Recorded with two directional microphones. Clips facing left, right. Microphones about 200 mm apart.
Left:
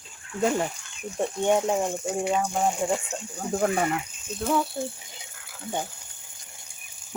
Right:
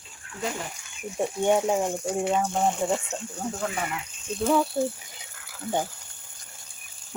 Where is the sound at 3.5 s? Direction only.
45° left (ahead or behind).